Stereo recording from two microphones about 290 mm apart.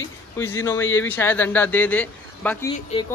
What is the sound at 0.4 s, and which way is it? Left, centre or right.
Speech, centre.